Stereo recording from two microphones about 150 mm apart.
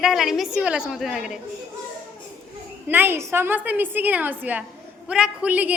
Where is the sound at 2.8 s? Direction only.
15° right (ahead or behind).